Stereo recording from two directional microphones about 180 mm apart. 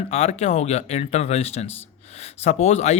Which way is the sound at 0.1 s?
35° left (ahead or behind).